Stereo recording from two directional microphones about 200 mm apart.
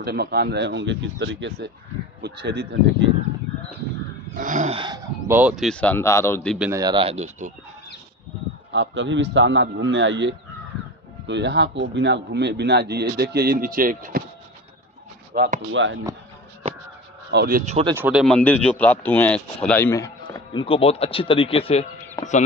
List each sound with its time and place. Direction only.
0.0 s speech: 50° right (ahead or behind)
2.2 s speech: 55° right (ahead or behind)
4.4 s a sound: 40° right (ahead or behind)
4.7 s speech: 20° right (ahead or behind)
5.4 s speech: centre (ahead or behind)
6.6 s speech: 15° right (ahead or behind); by 7.5 s 35° right (ahead or behind)
8.7 s speech: 65° right (ahead or behind); by 14.2 s 45° right (ahead or behind)
15.3 s speech: 45° right (ahead or behind)
15.7 s speech: 65° right (ahead or behind)
17.3 s speech: 50° right (ahead or behind)
17.9 s speech: 10° right (ahead or behind)
18.2 s speech: 5° left (ahead or behind); by 21.8 s 30° left (ahead or behind)